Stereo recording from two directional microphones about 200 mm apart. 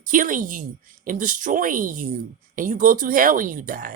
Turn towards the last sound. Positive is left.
turn(degrees=-45)  # may be behind; listen again after turning